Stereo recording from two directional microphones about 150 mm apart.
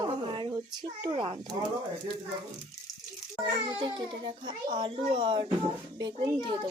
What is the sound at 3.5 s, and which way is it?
A child's voice, 30° right (ahead or behind).